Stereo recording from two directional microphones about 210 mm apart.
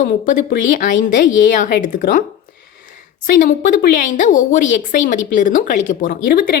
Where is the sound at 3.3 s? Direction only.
40° left (ahead or behind).